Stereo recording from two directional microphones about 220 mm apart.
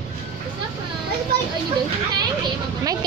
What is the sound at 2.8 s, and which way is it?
Speech, 15° right (ahead or behind).